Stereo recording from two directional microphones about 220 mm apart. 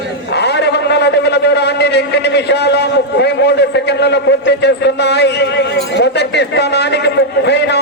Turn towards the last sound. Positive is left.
turn(degrees=50)  # may be behind; listen again after turning